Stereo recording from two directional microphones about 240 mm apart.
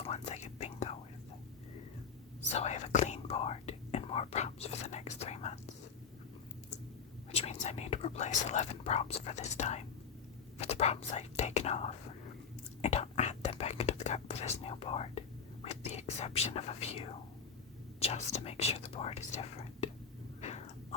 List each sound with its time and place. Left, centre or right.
0.0 s whispering: left
2.5 s whispering: left
7.3 s speech: left
12.8 s whispering: left
15.6 s speech: left
20.4 s a sound: left